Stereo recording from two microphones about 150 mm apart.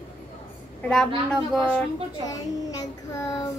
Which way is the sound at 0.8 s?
5° left (ahead or behind).